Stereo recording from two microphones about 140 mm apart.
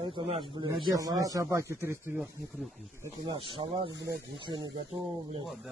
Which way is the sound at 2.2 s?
Centre (ahead or behind).